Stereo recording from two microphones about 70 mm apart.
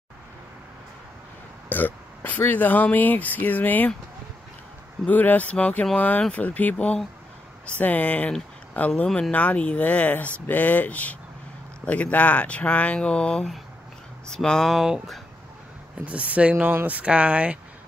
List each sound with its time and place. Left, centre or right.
1.7 s speech: left
5.0 s speech: left
14.8 s speech: centre
16.1 s speech: centre